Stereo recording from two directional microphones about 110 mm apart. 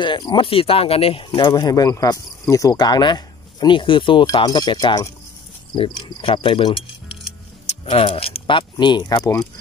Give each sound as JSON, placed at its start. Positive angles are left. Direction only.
{"t": 0.0, "sound": "speech", "side_deg": 45}
{"t": 1.5, "sound": "speech", "side_deg": 35}
{"t": 5.8, "sound": "speech", "side_deg": 50}
{"t": 7.8, "sound": "speech", "side_deg": 55}